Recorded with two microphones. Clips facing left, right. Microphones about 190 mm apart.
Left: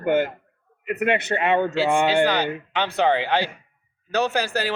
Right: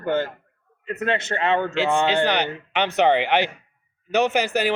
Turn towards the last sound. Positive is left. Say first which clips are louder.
# right 3 dB
turn(degrees=-15)  # may be behind; listen again after turning